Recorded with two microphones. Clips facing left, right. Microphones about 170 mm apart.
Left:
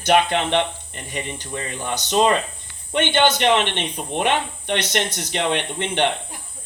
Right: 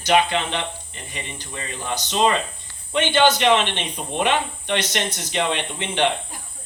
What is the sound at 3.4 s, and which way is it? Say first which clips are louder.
Speech: even; 55° left (ahead or behind).